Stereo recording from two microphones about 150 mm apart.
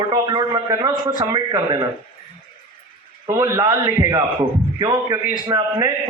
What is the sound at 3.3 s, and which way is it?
A man's voice, 20° right (ahead or behind).